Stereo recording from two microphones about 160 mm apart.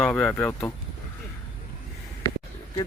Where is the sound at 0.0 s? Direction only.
5° left (ahead or behind).